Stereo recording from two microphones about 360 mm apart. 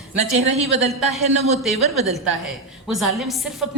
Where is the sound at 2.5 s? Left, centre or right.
Centre.